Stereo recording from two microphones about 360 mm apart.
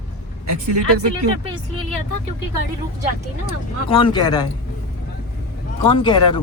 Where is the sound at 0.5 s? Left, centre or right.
Right.